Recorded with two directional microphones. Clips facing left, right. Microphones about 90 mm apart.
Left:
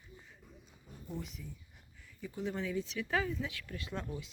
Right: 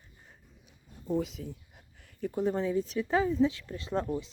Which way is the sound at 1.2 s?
90° right.